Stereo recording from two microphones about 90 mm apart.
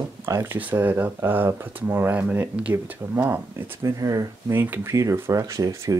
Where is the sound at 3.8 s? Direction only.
40° right (ahead or behind).